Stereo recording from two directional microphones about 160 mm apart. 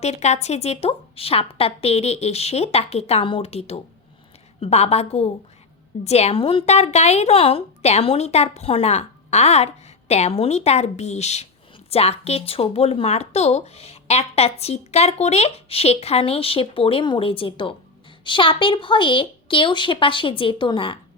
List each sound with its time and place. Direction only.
0.0 s speech: 45° left (ahead or behind)